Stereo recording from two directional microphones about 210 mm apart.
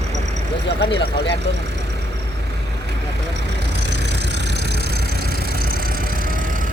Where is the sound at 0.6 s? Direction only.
55° left (ahead or behind).